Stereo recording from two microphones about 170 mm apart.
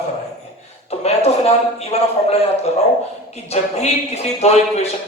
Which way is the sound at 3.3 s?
40° left (ahead or behind).